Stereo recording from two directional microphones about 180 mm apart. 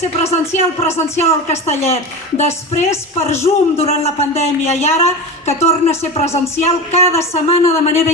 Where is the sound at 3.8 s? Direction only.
35° left (ahead or behind).